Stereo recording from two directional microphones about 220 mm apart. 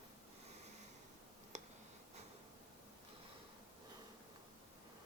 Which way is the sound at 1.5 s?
30° right (ahead or behind).